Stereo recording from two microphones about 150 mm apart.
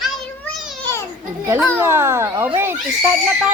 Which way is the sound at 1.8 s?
15° right (ahead or behind).